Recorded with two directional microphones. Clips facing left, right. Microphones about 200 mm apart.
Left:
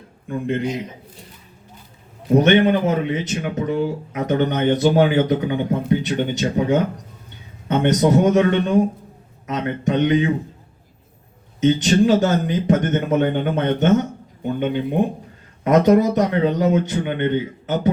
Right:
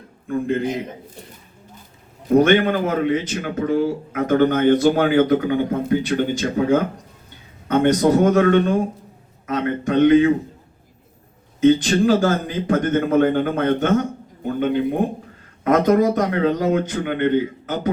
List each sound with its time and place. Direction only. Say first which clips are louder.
0.3 s speech: right 2 dB; 20° left (ahead or behind)
2.3 s speech: even; 20° left (ahead or behind)
11.6 s speech: right 1 dB; 20° left (ahead or behind)
15.6 s speech: left 1 dB; 25° left (ahead or behind)